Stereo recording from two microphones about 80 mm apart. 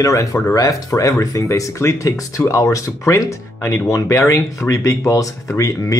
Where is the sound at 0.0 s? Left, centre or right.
Left.